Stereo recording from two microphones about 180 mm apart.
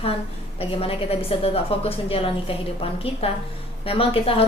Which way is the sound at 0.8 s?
30° left (ahead or behind).